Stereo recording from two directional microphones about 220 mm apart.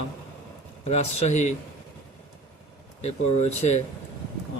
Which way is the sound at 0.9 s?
30° left (ahead or behind).